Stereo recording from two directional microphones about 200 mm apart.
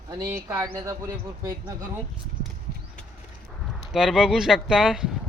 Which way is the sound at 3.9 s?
Centre (ahead or behind).